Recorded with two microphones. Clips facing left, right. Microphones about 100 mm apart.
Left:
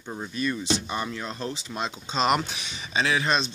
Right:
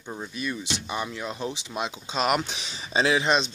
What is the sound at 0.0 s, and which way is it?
Speech, 5° left (ahead or behind).